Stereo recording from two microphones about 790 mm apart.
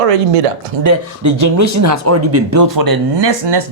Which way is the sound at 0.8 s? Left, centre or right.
Right.